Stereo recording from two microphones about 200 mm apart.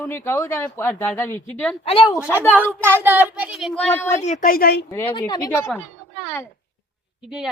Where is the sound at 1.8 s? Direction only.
30° left (ahead or behind).